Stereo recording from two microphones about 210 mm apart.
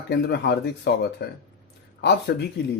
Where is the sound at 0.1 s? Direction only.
50° left (ahead or behind).